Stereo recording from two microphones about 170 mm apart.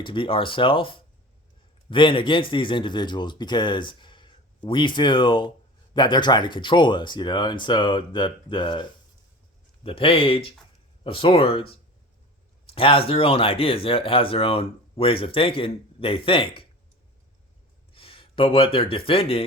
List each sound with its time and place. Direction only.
0.0 s speech: 30° left (ahead or behind)
12.7 s speech: 30° left (ahead or behind)
17.9 s speech: 30° left (ahead or behind)